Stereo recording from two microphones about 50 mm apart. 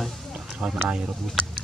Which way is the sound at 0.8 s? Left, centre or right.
Centre.